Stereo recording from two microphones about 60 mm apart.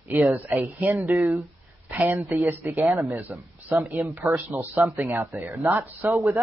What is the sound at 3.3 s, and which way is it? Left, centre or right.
Speech, right.